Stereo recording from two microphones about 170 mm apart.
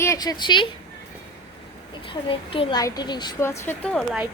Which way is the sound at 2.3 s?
30° left (ahead or behind).